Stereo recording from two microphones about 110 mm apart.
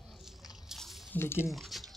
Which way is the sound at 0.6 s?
Centre (ahead or behind).